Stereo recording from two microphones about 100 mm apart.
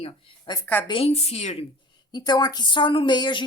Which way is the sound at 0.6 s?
20° left (ahead or behind).